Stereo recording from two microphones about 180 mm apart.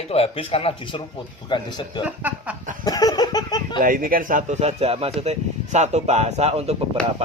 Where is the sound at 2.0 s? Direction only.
10° right (ahead or behind).